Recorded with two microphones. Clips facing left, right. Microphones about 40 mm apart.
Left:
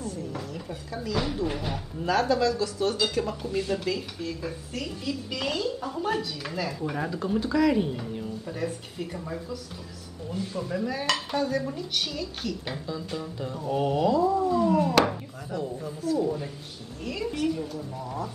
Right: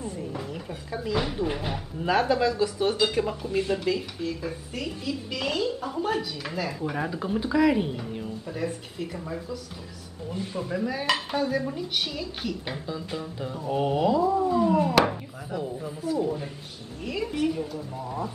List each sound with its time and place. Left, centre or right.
0.0 s speech: right; by 9.6 s centre
10.3 s speech: centre